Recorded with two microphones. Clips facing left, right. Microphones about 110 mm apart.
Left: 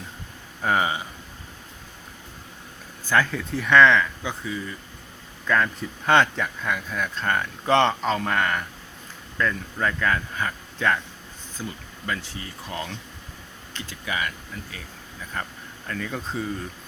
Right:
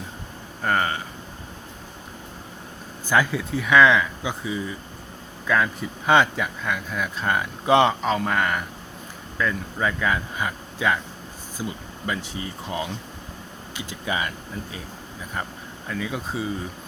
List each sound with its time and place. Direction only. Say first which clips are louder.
0.6 s speech: even; 5° left (ahead or behind)
3.1 s speech: right 1 dB; 10° right (ahead or behind)
14.0 s speech: right 2 dB; 25° right (ahead or behind); by 16.6 s 10° right (ahead or behind)